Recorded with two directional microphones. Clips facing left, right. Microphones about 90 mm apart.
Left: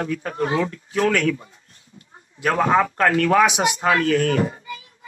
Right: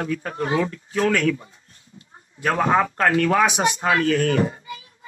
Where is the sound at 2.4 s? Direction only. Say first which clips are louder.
Left 1 dB; 25° right (ahead or behind).